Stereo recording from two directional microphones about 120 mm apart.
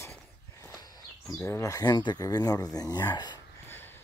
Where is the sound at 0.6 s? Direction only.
30° left (ahead or behind).